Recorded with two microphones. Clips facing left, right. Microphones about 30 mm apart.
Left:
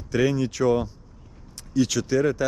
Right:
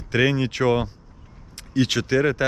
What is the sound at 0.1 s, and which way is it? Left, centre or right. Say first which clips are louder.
Speech: right 2 dB; right.